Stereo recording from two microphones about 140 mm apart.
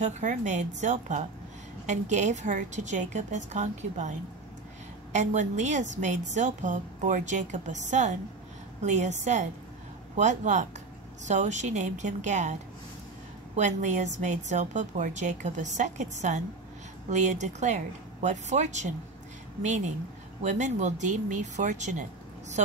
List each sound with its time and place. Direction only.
0.0 s a woman's voice: 65° right (ahead or behind)
5.1 s a woman's voice: 60° right (ahead or behind)
13.6 s a woman's voice: 60° right (ahead or behind)